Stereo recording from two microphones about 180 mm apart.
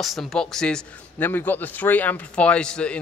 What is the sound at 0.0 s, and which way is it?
A man's voice, centre (ahead or behind).